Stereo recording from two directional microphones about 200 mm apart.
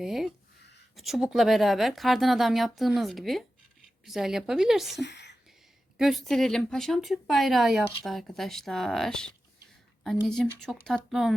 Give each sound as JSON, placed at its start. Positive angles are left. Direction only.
{"t": 0.0, "sound": "speech", "side_deg": 0}
{"t": 4.9, "sound": "speech", "side_deg": 60}
{"t": 6.0, "sound": "speech", "side_deg": 0}